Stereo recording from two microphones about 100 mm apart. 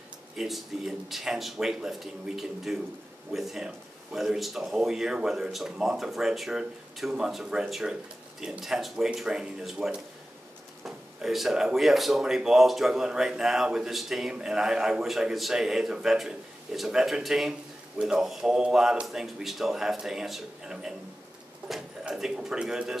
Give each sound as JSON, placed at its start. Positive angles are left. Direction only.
{"t": 0.4, "sound": "speech", "side_deg": -5}